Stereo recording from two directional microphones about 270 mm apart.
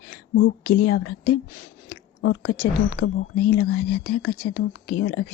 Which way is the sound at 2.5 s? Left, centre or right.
Left.